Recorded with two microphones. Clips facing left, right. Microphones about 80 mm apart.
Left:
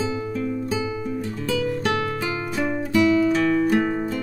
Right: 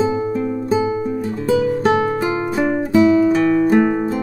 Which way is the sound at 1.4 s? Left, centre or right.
Right.